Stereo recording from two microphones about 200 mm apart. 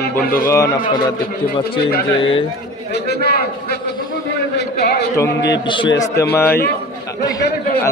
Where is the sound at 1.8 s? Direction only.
50° left (ahead or behind).